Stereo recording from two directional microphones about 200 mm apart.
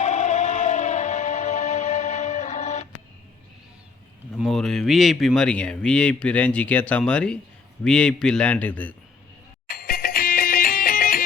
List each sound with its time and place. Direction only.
0.0 s music: 35° left (ahead or behind)
4.4 s speech: centre (ahead or behind)
9.6 s music: 45° left (ahead or behind)